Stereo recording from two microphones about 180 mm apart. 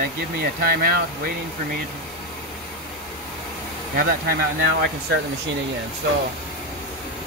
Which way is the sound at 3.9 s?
55° right (ahead or behind).